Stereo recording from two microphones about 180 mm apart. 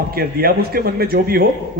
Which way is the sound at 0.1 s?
55° right (ahead or behind).